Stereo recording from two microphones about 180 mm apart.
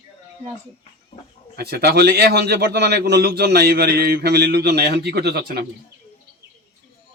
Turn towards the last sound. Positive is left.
turn(degrees=-60)  # may be behind; listen again after turning